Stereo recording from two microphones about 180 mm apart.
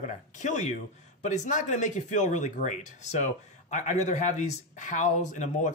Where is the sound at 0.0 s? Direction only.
45° left (ahead or behind).